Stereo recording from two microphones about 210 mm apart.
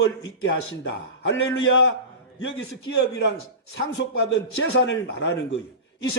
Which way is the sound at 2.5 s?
55° left (ahead or behind).